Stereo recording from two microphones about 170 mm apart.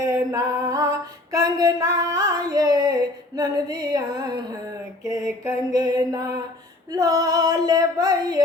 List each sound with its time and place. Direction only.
0.0 s female singing: 20° right (ahead or behind)